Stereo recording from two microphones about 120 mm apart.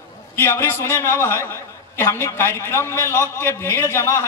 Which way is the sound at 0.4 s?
20° left (ahead or behind).